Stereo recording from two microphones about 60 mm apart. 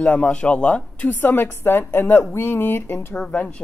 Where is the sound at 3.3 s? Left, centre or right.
Left.